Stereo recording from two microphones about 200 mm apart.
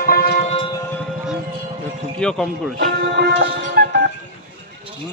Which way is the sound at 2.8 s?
50° right (ahead or behind).